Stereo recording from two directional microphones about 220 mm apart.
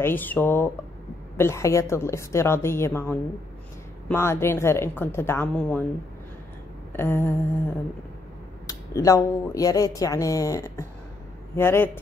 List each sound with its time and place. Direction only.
0.0 s speech: 10° left (ahead or behind)
6.9 s a sound: 10° left (ahead or behind)
8.6 s speech: 15° left (ahead or behind)